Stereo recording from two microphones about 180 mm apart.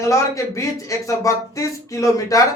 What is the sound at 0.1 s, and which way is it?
Speech, 15° left (ahead or behind).